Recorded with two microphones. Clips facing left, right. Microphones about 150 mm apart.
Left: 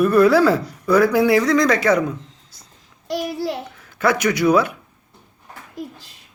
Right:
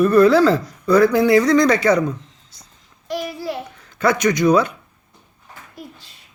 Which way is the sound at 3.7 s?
5° left (ahead or behind).